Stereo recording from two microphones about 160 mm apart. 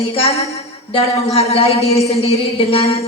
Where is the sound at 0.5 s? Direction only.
40° left (ahead or behind).